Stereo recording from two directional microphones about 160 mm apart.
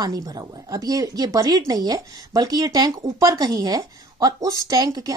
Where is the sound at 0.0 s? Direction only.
25° right (ahead or behind).